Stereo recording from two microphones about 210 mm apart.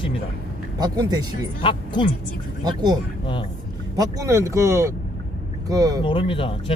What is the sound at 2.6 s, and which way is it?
Speech, 20° right (ahead or behind).